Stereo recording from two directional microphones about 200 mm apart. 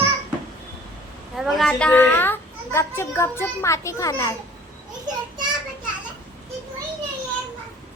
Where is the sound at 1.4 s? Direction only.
Centre (ahead or behind); by 4.3 s 15° left (ahead or behind).